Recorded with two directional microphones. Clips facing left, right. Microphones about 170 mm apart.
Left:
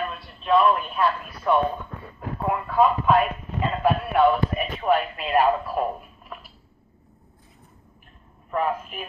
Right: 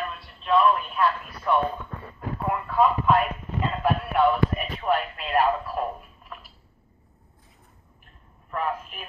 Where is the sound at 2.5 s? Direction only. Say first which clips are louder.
Left 2 dB; 10° left (ahead or behind).